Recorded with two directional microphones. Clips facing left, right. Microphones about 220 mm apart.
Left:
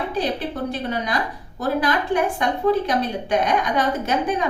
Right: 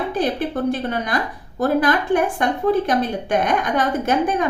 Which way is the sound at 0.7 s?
50° right (ahead or behind).